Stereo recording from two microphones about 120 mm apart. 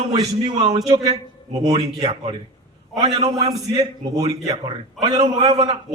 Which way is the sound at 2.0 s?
35° right (ahead or behind).